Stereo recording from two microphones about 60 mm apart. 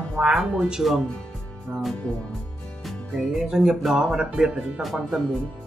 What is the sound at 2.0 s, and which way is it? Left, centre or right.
Speech, left.